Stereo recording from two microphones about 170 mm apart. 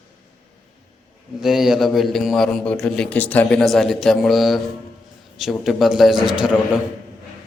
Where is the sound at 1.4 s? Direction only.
Centre (ahead or behind).